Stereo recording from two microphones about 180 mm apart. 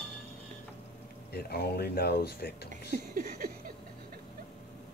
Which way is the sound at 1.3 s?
60° left (ahead or behind).